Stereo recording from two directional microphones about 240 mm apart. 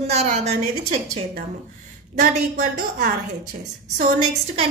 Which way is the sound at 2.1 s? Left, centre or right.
Right.